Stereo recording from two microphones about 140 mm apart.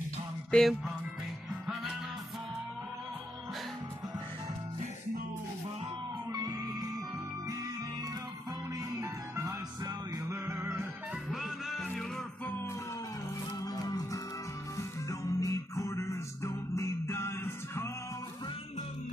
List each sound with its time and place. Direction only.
0.5 s music: centre (ahead or behind)
6.3 s music: 25° right (ahead or behind)
9.0 s music: 25° right (ahead or behind)
11.2 s music: centre (ahead or behind)
13.6 s music: 25° left (ahead or behind)